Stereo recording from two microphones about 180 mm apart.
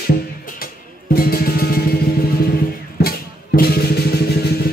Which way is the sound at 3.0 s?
55° left (ahead or behind).